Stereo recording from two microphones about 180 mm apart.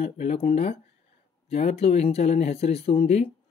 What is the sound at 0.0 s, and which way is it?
Speech, 35° left (ahead or behind).